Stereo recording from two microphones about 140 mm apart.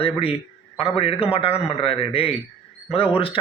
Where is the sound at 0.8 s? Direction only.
45° left (ahead or behind).